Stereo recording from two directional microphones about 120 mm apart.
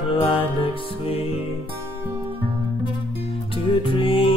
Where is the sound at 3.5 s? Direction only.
50° left (ahead or behind).